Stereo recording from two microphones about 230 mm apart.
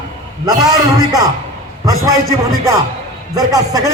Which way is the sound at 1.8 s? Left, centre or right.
Centre.